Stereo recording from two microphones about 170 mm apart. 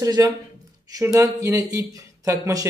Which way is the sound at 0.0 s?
20° right (ahead or behind).